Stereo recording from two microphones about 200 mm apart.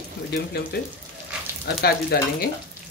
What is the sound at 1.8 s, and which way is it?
Speech, 50° left (ahead or behind).